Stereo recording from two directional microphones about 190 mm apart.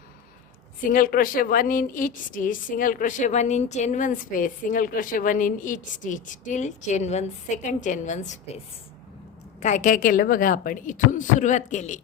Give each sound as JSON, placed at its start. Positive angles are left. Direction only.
{"t": 0.9, "sound": "a woman's voice", "side_deg": 50}
{"t": 9.6, "sound": "a woman's voice", "side_deg": 40}